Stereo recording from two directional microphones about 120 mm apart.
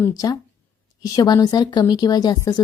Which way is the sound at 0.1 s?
30° left (ahead or behind).